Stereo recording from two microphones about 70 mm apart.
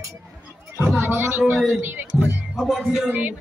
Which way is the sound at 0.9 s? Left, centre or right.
Right.